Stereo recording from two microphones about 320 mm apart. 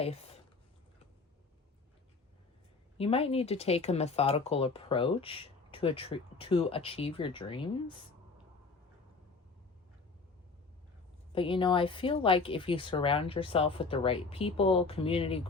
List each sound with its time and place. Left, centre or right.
0.0 s speech: centre
3.0 s speech: centre
11.3 s speech: centre